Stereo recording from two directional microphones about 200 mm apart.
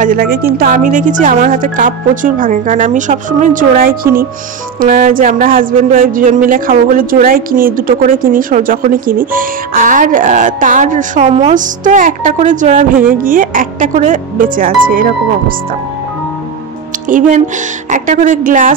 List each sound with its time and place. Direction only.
0.0 s a woman's voice: 45° right (ahead or behind)
17.8 s speech: 40° right (ahead or behind)